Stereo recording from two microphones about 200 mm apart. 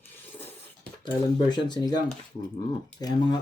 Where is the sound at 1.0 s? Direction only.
20° left (ahead or behind).